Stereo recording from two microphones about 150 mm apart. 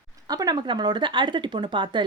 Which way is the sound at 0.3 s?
25° right (ahead or behind).